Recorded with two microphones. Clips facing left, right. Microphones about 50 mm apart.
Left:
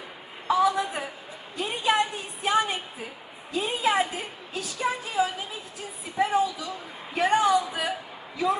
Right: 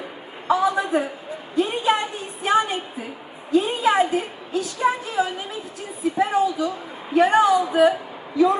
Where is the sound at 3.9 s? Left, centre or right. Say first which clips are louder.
Right 7 dB; centre.